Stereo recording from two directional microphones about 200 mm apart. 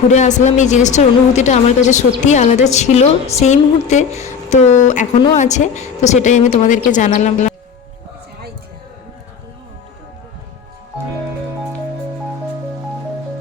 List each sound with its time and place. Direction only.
0.1 s a woman's voice: 35° left (ahead or behind)